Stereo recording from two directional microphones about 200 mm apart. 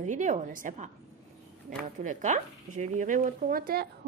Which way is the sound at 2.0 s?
40° right (ahead or behind).